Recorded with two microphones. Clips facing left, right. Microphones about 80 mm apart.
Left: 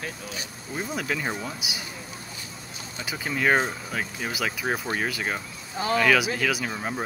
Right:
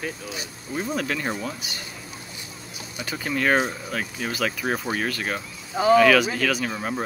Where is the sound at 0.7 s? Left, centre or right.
Centre.